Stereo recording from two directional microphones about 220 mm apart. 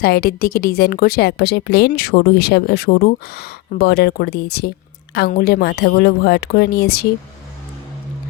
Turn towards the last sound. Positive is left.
turn(degrees=45)  # may be behind; listen again after turning